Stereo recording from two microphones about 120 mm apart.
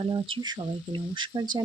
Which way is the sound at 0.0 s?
45° right (ahead or behind).